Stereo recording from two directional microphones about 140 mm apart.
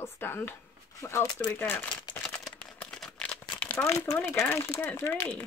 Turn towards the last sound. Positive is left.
turn(degrees=15)  # may be behind; listen again after turning